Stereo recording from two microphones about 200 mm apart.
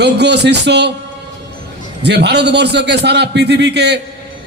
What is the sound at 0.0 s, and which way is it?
Speech, 55° right (ahead or behind).